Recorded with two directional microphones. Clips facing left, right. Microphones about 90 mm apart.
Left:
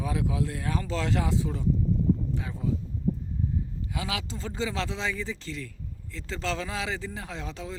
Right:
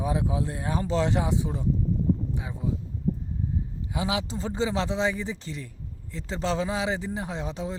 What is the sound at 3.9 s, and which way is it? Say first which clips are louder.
Speech: right 5 dB; 25° right (ahead or behind).